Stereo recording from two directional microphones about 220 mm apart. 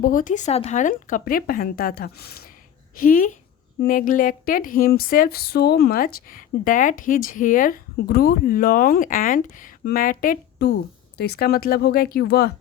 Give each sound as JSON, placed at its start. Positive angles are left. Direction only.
{"t": 0.0, "sound": "speech", "side_deg": 40}